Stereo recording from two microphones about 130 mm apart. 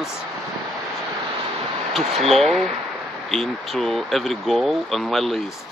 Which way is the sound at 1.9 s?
Centre (ahead or behind).